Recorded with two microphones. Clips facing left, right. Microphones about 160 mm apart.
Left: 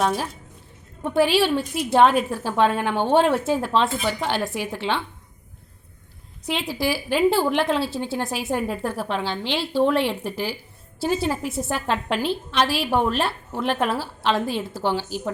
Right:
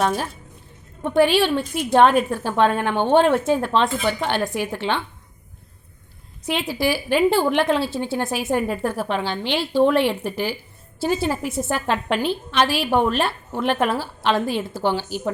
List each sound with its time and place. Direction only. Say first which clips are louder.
0.0 s a woman's voice: right 1 dB; centre (ahead or behind)
6.4 s a woman's voice: right 2 dB; centre (ahead or behind)